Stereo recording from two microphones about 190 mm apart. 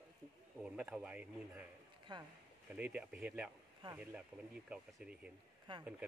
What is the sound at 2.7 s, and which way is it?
A man's voice, 10° right (ahead or behind).